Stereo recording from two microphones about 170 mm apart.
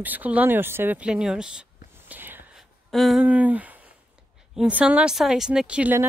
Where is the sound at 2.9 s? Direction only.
Centre (ahead or behind).